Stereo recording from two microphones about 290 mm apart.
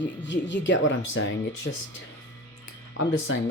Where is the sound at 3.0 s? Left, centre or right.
Left.